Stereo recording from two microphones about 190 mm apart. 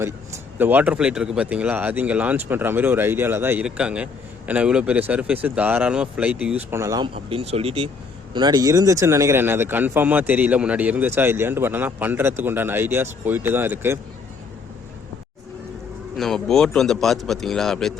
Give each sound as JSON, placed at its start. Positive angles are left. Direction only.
{"t": 0.6, "sound": "speech", "side_deg": -10}
{"t": 7.3, "sound": "speech", "side_deg": -30}
{"t": 16.1, "sound": "speech", "side_deg": 0}